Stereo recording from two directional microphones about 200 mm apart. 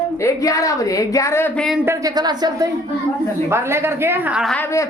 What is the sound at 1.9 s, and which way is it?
A woman's voice, 20° right (ahead or behind).